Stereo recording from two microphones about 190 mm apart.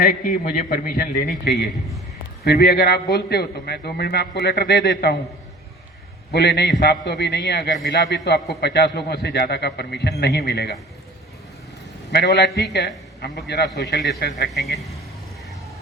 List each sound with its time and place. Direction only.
0.0 s a man's voice: 45° left (ahead or behind); by 5.1 s 60° left (ahead or behind)
6.3 s a man's voice: 60° left (ahead or behind)
12.1 s a man's voice: 60° left (ahead or behind)
14.5 s a man's voice: centre (ahead or behind)